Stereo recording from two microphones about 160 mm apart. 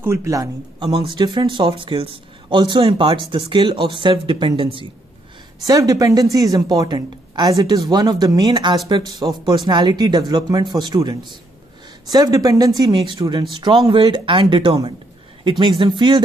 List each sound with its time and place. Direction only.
0.0 s a man's voice: 15° right (ahead or behind)
5.7 s a man's voice: 20° right (ahead or behind)